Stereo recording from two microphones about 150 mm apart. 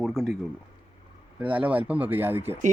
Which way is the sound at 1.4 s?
10° right (ahead or behind).